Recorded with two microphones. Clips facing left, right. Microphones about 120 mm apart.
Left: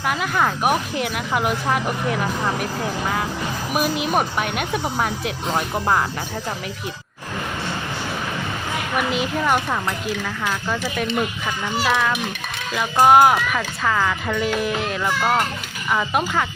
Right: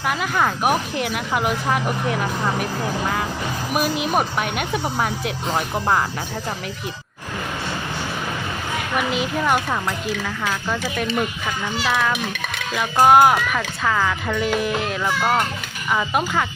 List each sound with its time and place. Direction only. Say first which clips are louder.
0.1 s speech: even; centre (ahead or behind)
9.0 s speech: even; centre (ahead or behind)